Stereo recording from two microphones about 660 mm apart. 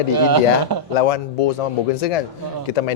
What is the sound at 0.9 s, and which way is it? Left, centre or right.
Speech, left.